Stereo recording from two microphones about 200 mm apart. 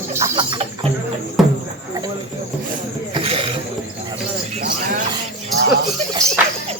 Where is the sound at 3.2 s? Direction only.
25° right (ahead or behind).